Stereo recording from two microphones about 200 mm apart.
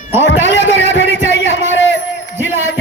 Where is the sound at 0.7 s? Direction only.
65° left (ahead or behind).